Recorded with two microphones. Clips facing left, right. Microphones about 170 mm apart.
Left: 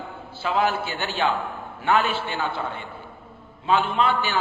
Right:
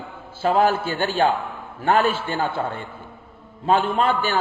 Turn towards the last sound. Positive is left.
turn(degrees=-45)  # may be behind; listen again after turning